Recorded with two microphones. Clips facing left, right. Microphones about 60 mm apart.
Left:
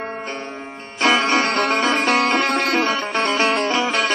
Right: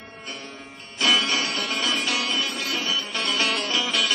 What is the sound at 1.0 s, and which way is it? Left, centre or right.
Music, left.